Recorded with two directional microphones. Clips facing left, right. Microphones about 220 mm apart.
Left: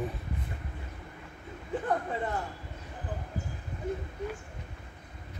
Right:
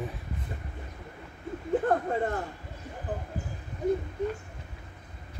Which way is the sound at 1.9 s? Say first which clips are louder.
Even; 50° right (ahead or behind).